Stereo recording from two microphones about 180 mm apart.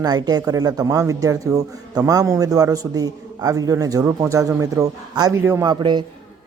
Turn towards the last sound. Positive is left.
turn(degrees=-25)  # may be behind; listen again after turning